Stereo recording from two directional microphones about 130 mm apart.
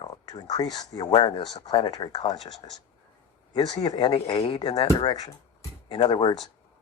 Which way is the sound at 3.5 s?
30° left (ahead or behind).